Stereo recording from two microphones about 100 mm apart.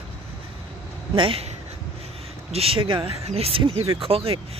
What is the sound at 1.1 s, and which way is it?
Speech, 60° right (ahead or behind).